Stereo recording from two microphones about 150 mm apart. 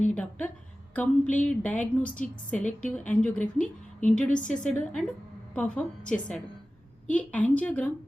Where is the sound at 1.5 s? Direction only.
10° left (ahead or behind).